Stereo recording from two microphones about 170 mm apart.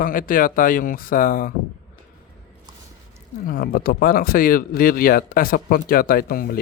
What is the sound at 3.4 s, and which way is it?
Speech, 60° left (ahead or behind).